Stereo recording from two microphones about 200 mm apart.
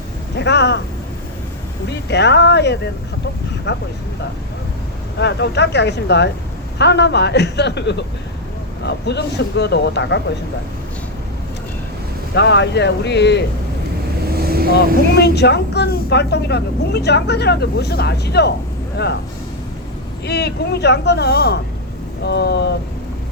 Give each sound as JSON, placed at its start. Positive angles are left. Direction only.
{"t": 0.3, "sound": "a woman's voice", "side_deg": 60}
{"t": 2.0, "sound": "a woman's voice", "side_deg": 60}
{"t": 5.2, "sound": "a woman's voice", "side_deg": 60}
{"t": 12.3, "sound": "a woman's voice", "side_deg": 60}
{"t": 14.3, "sound": "vehicle", "side_deg": -50}
{"t": 15.1, "sound": "a woman's voice", "side_deg": 55}
{"t": 20.2, "sound": "a woman's voice", "side_deg": 55}